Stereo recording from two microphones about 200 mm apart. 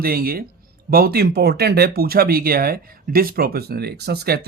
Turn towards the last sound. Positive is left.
turn(degrees=-55)  # may be behind; listen again after turning